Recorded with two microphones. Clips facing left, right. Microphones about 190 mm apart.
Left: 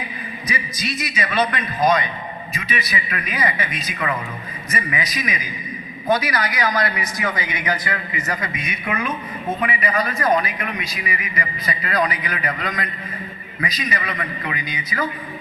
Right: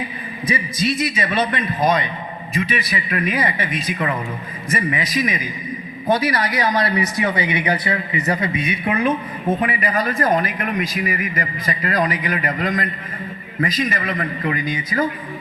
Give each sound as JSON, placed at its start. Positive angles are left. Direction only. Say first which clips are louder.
{"t": 0.4, "sound": "speech", "louder": "right 7 dB", "side_deg": -25}
{"t": 3.1, "sound": "speech", "louder": "right 7 dB", "side_deg": -50}
{"t": 3.3, "sound": "speech", "louder": "right 2 dB", "side_deg": -30}
{"t": 4.7, "sound": "speech", "louder": "right 5 dB", "side_deg": -30}
{"t": 9.6, "sound": "speech", "louder": "right 1 dB", "side_deg": -50}